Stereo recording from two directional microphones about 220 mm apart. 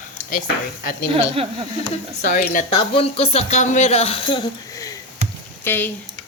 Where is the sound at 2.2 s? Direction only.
40° left (ahead or behind).